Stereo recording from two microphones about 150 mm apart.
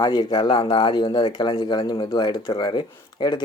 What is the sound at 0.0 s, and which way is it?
Speech, 25° left (ahead or behind).